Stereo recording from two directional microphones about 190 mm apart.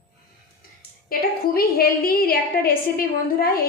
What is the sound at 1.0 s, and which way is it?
A woman's voice, 50° left (ahead or behind).